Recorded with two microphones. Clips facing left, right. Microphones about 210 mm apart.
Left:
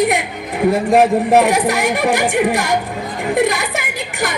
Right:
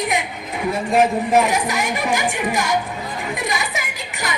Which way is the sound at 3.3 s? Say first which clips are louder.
Left 11 dB; 60° left (ahead or behind).